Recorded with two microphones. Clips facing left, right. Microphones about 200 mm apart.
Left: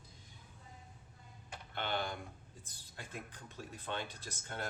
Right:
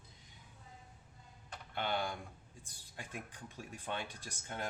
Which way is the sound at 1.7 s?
10° right (ahead or behind).